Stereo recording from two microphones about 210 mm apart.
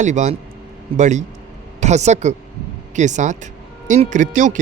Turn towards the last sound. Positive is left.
turn(degrees=-35)  # may be behind; listen again after turning